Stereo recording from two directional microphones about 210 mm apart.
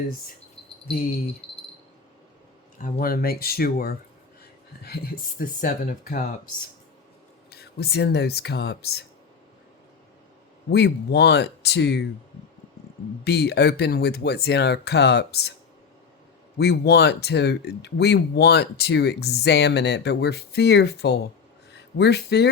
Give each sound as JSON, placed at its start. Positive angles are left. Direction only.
{"t": 1.4, "sound": "a sound", "side_deg": 30}
{"t": 2.7, "sound": "speech", "side_deg": 40}
{"t": 7.5, "sound": "speech", "side_deg": 50}
{"t": 10.7, "sound": "speech", "side_deg": 50}
{"t": 13.2, "sound": "speech", "side_deg": 50}
{"t": 16.6, "sound": "speech", "side_deg": 50}